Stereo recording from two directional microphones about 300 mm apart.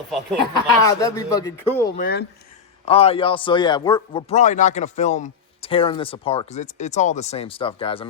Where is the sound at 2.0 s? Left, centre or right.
Left.